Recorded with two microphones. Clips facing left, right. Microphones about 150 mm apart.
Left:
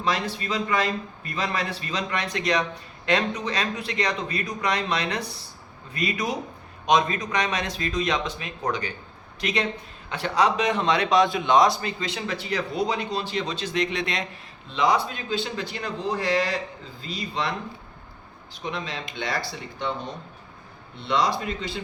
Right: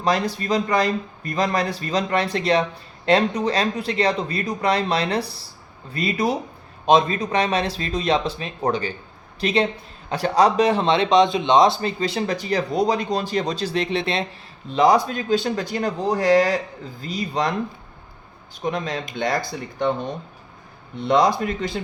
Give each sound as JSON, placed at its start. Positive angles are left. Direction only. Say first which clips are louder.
{"t": 0.3, "sound": "speech", "louder": "right 5 dB", "side_deg": -40}
{"t": 14.7, "sound": "speech", "louder": "right 6 dB", "side_deg": -40}
{"t": 18.6, "sound": "speech", "louder": "right 6 dB", "side_deg": -45}
{"t": 21.1, "sound": "speech", "louder": "right 6 dB", "side_deg": -45}